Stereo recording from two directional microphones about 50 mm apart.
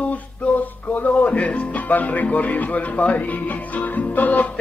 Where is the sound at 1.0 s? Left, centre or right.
Left.